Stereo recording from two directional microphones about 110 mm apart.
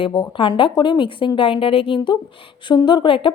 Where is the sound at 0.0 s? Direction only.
50° left (ahead or behind).